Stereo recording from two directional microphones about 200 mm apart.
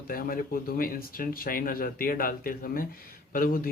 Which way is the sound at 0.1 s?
45° left (ahead or behind).